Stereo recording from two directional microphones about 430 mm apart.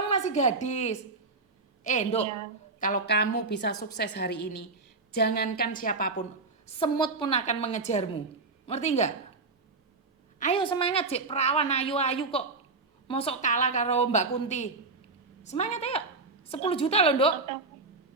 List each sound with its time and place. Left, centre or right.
0.1 s a woman's voice: centre
10.4 s a woman's voice: centre